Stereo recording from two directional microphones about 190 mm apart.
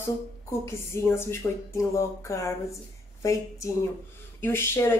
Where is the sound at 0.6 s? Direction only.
15° left (ahead or behind).